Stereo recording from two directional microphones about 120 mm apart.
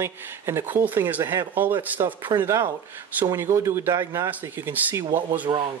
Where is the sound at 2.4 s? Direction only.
25° right (ahead or behind).